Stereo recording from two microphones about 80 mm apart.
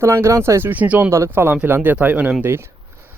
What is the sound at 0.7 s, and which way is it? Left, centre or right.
Speech, centre.